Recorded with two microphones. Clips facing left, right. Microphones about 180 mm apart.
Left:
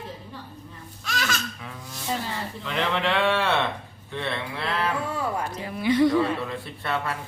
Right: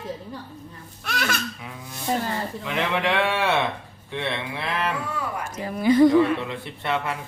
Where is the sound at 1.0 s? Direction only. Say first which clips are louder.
Right 2 dB; 60° right (ahead or behind).